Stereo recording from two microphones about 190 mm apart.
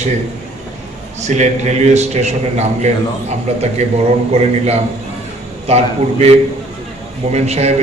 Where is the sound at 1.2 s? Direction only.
40° right (ahead or behind).